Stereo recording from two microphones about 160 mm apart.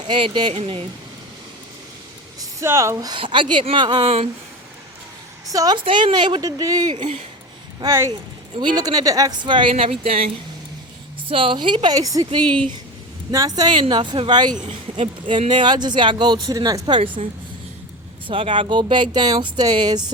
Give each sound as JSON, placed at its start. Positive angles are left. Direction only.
{"t": 0.1, "sound": "speech", "side_deg": -30}
{"t": 2.4, "sound": "speech", "side_deg": -20}
{"t": 5.5, "sound": "speech", "side_deg": -20}
{"t": 18.3, "sound": "speech", "side_deg": -30}